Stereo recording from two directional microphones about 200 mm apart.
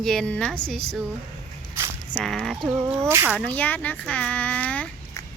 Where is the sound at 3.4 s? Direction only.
5° left (ahead or behind).